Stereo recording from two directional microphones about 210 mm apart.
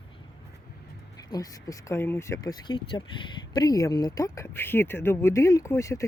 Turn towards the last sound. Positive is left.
turn(degrees=15)  # may be behind; listen again after turning